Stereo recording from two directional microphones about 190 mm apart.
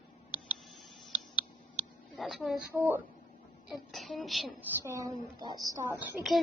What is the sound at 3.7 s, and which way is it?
Speech, centre (ahead or behind).